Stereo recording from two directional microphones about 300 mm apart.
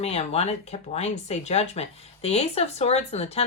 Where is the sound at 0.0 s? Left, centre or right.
Left.